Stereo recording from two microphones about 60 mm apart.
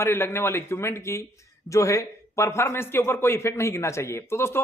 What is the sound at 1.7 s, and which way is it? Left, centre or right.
A man's voice, left.